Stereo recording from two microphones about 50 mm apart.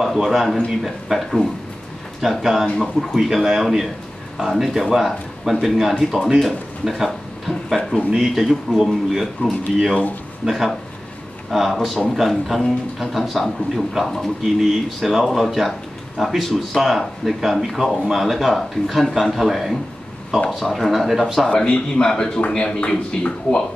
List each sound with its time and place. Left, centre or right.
0.0 s speech: centre
21.5 s speech: left